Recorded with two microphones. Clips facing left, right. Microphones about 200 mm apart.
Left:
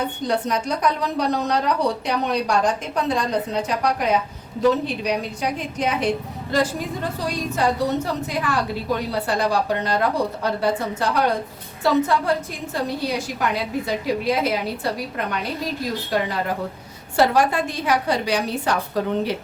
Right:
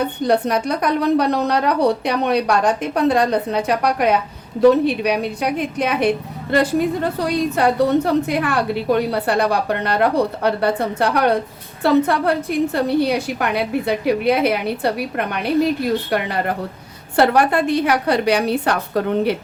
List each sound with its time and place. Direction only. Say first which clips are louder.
0.3 s a woman's voice: right 5 dB; 60° right (ahead or behind)